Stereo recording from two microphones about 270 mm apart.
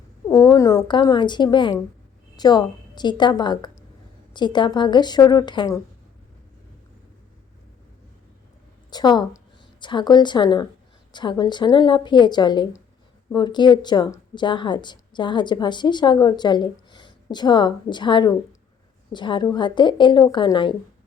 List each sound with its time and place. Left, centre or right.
0.3 s a woman's voice: centre
8.9 s a woman's voice: centre